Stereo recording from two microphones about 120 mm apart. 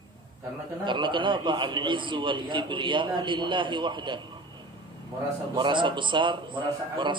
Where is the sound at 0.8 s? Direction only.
40° right (ahead or behind).